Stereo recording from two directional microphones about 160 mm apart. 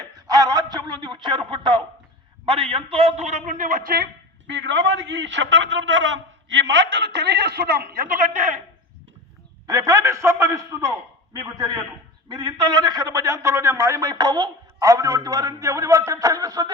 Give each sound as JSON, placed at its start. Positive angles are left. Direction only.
{"t": 0.0, "sound": "a sound", "side_deg": -25}
{"t": 2.5, "sound": "a man's voice", "side_deg": -35}
{"t": 4.4, "sound": "a man's voice", "side_deg": -90}
{"t": 6.7, "sound": "a man's voice", "side_deg": -90}
{"t": 9.6, "sound": "a man's voice", "side_deg": -20}
{"t": 12.3, "sound": "a man's voice", "side_deg": -30}